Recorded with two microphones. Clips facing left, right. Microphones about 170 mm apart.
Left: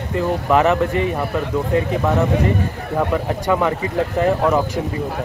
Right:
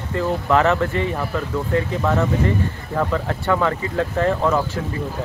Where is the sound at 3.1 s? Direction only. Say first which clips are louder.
Left 2 dB; 15° left (ahead or behind).